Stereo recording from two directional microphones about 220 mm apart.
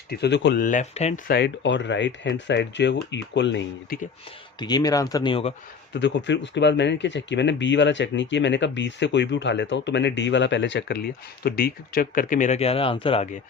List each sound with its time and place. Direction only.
0.1 s speech: 50° left (ahead or behind)
0.6 s speech: 35° left (ahead or behind)
1.3 s speech: 50° left (ahead or behind)
4.6 s speech: 15° left (ahead or behind)
5.9 s speech: 55° left (ahead or behind); by 13.2 s 25° left (ahead or behind)